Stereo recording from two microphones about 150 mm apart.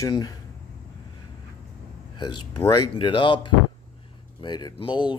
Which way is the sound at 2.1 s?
30° left (ahead or behind).